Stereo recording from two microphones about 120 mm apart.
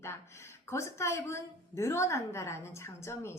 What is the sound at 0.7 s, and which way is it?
A woman's voice, 25° left (ahead or behind).